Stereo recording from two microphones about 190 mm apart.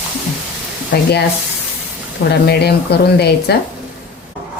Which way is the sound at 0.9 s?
60° left (ahead or behind).